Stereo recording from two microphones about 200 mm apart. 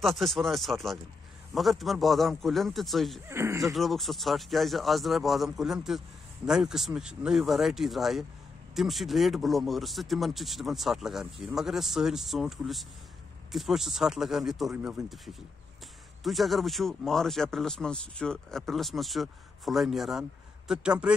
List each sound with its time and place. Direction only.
0.0 s speech: centre (ahead or behind)
3.3 s speech: 15° right (ahead or behind)
3.7 s speech: centre (ahead or behind)